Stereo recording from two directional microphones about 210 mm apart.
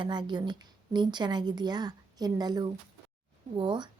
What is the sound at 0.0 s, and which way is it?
A woman's voice, 20° right (ahead or behind).